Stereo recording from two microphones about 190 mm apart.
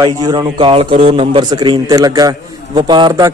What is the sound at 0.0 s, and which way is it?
A man's voice, 25° right (ahead or behind).